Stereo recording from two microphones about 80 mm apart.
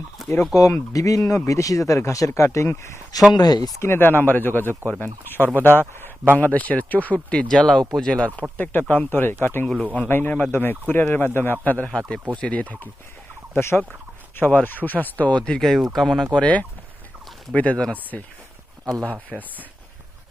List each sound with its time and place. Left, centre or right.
0.2 s chicken: centre
0.5 s speech: left
3.3 s speech: left
3.8 s speech: left
9.8 s speech: centre
11.9 s speech: centre
13.5 s speech: left
15.4 s speech: centre
16.3 s speech: centre
19.3 s speech: centre